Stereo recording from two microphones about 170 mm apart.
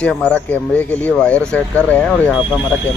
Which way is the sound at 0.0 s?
5° left (ahead or behind).